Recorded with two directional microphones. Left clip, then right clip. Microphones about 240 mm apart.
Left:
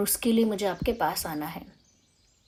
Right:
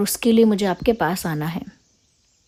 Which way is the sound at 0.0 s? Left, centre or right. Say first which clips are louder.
Right 8 dB; right.